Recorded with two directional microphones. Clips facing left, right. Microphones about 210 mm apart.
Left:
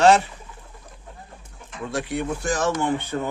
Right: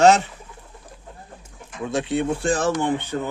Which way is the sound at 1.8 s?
20° right (ahead or behind).